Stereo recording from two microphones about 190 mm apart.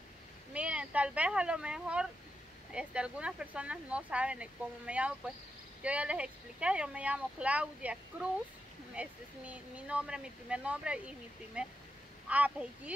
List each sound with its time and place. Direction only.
0.5 s speech: 5° right (ahead or behind)